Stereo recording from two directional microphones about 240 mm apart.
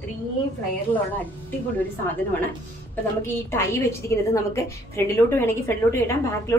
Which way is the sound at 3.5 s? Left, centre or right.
Centre.